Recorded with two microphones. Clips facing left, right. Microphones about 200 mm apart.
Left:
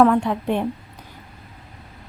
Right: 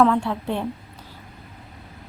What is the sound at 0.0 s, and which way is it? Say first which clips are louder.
Speech: left 3 dB; 15° left (ahead or behind).